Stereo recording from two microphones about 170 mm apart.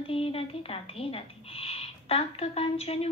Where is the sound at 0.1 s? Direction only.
35° left (ahead or behind).